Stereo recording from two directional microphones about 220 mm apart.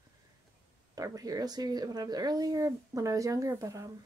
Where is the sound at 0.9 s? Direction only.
15° right (ahead or behind).